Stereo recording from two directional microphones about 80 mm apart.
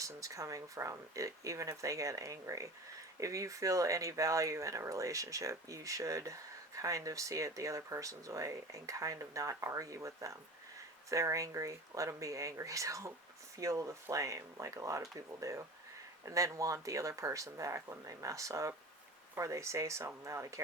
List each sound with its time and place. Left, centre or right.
0.0 s speech: right